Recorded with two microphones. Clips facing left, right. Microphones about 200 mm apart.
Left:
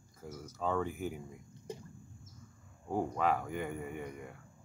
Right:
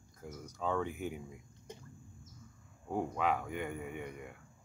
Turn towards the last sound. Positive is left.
turn(degrees=0)  # may be behind; listen again after turning